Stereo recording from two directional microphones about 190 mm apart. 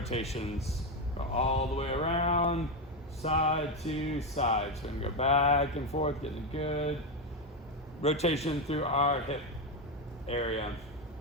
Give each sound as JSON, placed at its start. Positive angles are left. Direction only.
{"t": 0.0, "sound": "speech", "side_deg": 35}
{"t": 8.0, "sound": "speech", "side_deg": 35}